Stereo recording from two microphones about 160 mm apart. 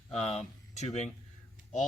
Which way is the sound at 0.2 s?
40° left (ahead or behind).